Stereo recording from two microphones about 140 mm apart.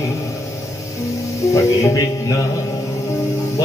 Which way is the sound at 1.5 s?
25° left (ahead or behind).